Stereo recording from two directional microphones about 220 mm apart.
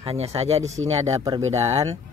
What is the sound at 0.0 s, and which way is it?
Speech, 25° right (ahead or behind).